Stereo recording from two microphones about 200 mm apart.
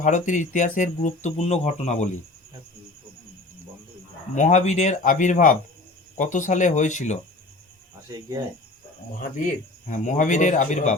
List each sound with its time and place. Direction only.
0.0 s speech: 40° left (ahead or behind)
4.4 s speech: 35° left (ahead or behind)
9.1 s speech: 40° left (ahead or behind)